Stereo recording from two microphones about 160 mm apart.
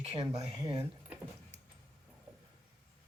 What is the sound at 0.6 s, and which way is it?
Speech, 25° right (ahead or behind).